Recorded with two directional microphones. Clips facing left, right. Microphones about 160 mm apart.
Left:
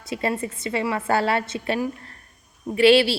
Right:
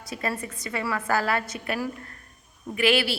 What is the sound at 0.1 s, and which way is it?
A woman's voice, 25° left (ahead or behind).